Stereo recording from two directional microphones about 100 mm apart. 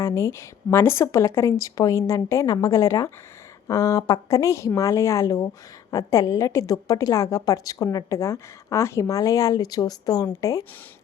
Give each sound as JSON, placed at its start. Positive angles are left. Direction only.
{"t": 0.0, "sound": "a woman's voice", "side_deg": 25}